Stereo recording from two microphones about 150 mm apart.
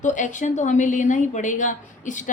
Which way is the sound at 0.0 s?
55° left (ahead or behind).